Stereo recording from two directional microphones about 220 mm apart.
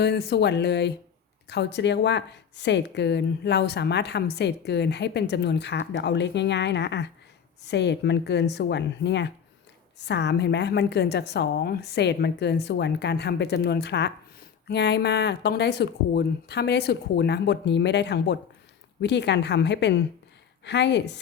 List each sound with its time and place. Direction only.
0.0 s speech: 50° left (ahead or behind)